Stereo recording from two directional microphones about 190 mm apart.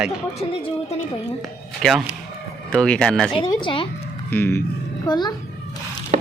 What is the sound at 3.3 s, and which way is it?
Speech, 25° left (ahead or behind).